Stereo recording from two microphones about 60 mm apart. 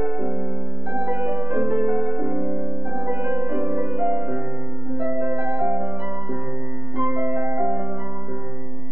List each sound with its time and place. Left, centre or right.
0.0 s music: right
7.0 s music: right